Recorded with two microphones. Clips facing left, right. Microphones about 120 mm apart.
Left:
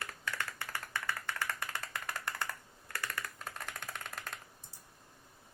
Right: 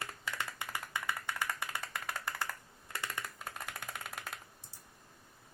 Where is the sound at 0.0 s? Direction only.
20° right (ahead or behind).